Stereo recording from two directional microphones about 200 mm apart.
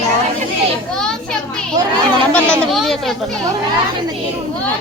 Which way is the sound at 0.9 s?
5° left (ahead or behind).